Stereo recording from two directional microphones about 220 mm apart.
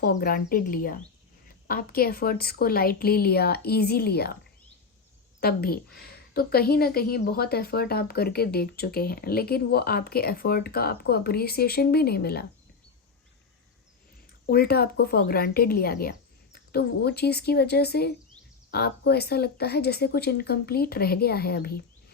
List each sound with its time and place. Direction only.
0.0 s a woman's voice: 45° left (ahead or behind)
5.4 s a woman's voice: 45° left (ahead or behind)
14.4 s a woman's voice: 45° left (ahead or behind)